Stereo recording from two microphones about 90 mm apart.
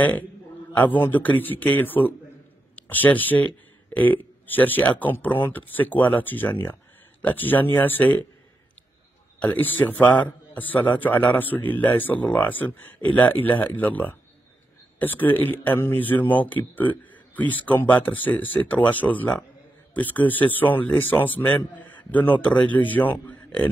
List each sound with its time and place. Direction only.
0.7 s a man's voice: 20° left (ahead or behind)
9.4 s a man's voice: 20° left (ahead or behind)